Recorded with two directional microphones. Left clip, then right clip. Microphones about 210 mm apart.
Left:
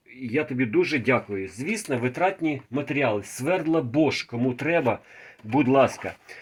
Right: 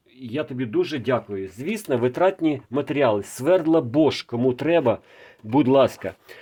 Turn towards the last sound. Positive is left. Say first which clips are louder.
# right 2 dB
turn(degrees=-45)  # may be behind; listen again after turning